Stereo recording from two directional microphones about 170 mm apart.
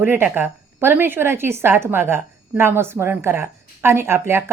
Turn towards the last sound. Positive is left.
turn(degrees=-15)  # may be behind; listen again after turning